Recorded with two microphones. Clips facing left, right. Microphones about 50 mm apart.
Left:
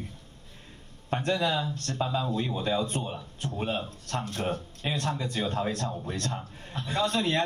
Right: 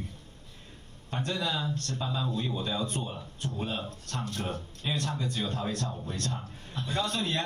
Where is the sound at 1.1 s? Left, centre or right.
Left.